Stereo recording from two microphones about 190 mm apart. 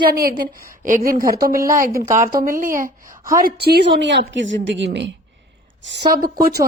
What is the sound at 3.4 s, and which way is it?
A woman's voice, 55° right (ahead or behind).